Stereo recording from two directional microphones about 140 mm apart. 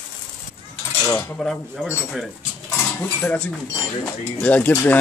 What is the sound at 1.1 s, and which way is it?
Cutlery, 20° left (ahead or behind).